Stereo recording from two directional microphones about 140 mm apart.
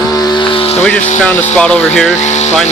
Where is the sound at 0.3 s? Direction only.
40° left (ahead or behind).